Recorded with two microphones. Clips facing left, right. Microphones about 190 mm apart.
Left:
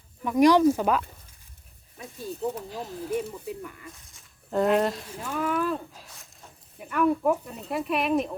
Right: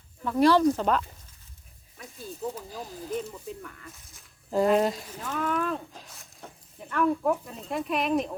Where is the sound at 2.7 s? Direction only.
Centre (ahead or behind).